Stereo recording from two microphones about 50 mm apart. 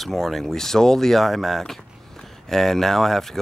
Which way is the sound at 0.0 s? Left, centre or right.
Centre.